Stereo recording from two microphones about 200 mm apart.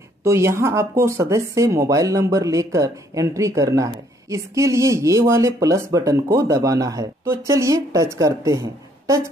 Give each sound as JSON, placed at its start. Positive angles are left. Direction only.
{"t": 0.2, "sound": "speech", "side_deg": -15}